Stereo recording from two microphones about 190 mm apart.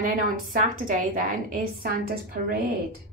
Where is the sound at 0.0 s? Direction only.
45° right (ahead or behind).